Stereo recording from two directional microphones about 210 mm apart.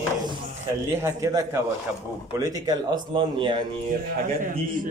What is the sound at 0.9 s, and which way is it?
A man's voice, 15° right (ahead or behind).